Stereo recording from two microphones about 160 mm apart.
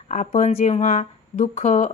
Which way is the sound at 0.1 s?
50° left (ahead or behind).